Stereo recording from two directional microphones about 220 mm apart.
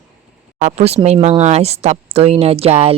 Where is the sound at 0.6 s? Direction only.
30° right (ahead or behind).